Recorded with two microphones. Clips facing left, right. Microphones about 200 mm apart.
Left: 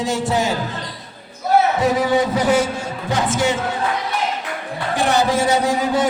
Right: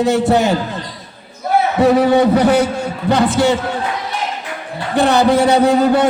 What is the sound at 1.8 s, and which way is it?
A man's voice, 60° right (ahead or behind).